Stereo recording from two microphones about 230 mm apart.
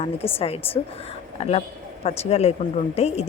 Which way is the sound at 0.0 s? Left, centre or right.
Left.